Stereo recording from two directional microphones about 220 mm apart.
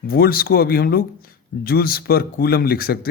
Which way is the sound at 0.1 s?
40° left (ahead or behind).